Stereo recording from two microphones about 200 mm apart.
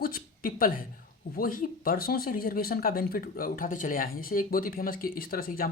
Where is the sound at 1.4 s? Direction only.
45° left (ahead or behind).